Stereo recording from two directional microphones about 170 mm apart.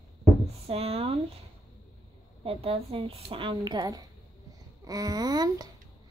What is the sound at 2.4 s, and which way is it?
A woman's voice, 35° right (ahead or behind).